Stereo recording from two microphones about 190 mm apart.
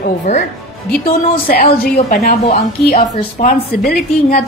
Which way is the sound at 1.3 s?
55° left (ahead or behind).